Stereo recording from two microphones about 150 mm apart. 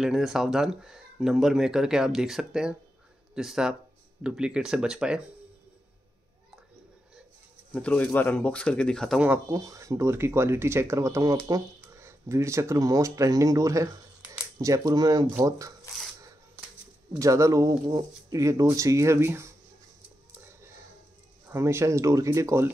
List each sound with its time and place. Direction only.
0.0 s speech: centre (ahead or behind)
7.7 s speech: 10° left (ahead or behind)
9.5 s speech: 20° right (ahead or behind)
17.2 s speech: 20° right (ahead or behind)
21.5 s speech: 15° right (ahead or behind)